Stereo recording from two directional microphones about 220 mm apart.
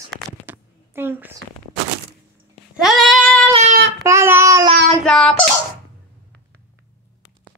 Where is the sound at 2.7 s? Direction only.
Centre (ahead or behind).